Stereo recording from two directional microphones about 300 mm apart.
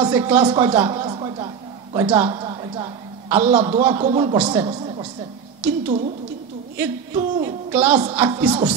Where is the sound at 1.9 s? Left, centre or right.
Centre.